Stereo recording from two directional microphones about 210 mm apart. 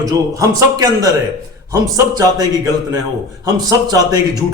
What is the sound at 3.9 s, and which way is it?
Speech, 15° right (ahead or behind).